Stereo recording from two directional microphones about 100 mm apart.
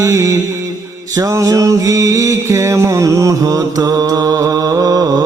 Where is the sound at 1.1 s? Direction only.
35° right (ahead or behind).